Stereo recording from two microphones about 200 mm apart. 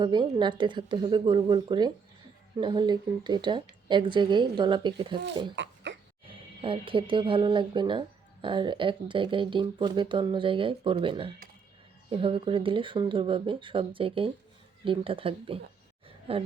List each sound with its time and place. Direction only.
0.0 s speech: 20° right (ahead or behind)
5.9 s music: 70° right (ahead or behind)
6.6 s speech: 25° right (ahead or behind)
16.0 s a sound: 30° right (ahead or behind)